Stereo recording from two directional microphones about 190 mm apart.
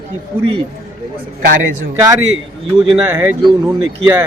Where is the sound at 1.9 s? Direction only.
15° right (ahead or behind).